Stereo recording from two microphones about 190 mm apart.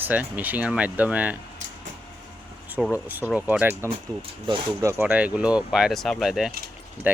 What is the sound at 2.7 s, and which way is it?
Speech, 5° right (ahead or behind).